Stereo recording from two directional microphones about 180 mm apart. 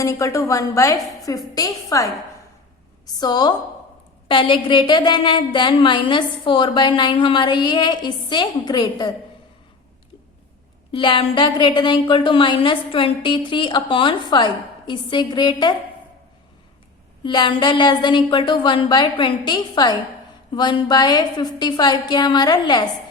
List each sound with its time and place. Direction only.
0.0 s a woman's voice: 15° left (ahead or behind)
3.2 s a woman's voice: 25° left (ahead or behind)
10.9 s a woman's voice: 30° left (ahead or behind)
17.2 s a woman's voice: 25° left (ahead or behind)